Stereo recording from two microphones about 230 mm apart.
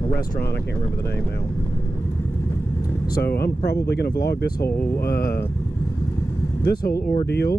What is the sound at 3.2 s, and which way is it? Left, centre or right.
Speech, left.